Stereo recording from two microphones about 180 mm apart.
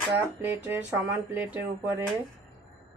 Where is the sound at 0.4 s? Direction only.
10° right (ahead or behind).